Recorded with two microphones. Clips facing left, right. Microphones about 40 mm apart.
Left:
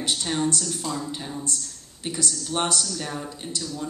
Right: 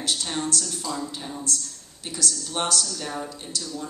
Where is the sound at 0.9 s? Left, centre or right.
Left.